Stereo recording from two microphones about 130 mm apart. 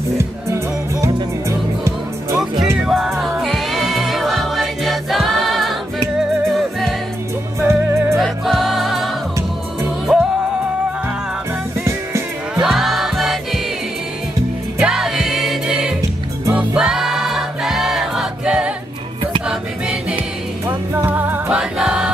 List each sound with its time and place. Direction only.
2.8 s music: 5° right (ahead or behind)
7.6 s music: 20° right (ahead or behind)
8.2 s music: centre (ahead or behind)
12.5 s music: centre (ahead or behind)
14.8 s music: 5° right (ahead or behind)
16.5 s choir: 5° right (ahead or behind)
19.4 s music: 5° right (ahead or behind)